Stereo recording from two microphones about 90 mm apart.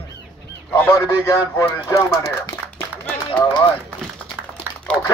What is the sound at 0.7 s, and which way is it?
Speech, 30° left (ahead or behind).